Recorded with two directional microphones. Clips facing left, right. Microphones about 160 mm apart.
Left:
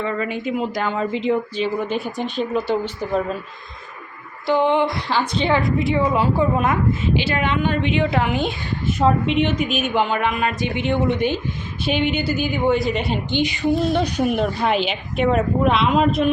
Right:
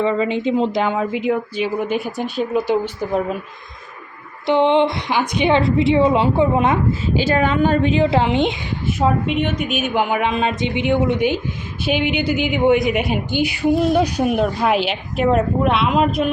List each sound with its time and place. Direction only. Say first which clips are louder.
0.0 s speech: right 6 dB; 25° right (ahead or behind)
4.4 s a woman's voice: right 3 dB; 20° right (ahead or behind)
7.0 s a woman's voice: right 3 dB; 40° right (ahead or behind); by 8.5 s 25° right (ahead or behind)
8.9 s speech: left 1 dB; 5° right (ahead or behind)
9.2 s a woman's voice: left 1 dB; 45° right (ahead or behind)
9.6 s speech: even; centre (ahead or behind)